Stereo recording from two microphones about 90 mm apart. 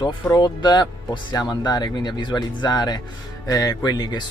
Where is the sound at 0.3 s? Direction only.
55° left (ahead or behind).